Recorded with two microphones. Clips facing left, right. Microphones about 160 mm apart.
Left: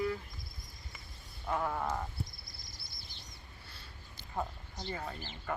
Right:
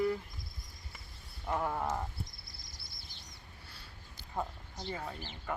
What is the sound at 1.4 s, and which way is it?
Wild animals, 10° right (ahead or behind).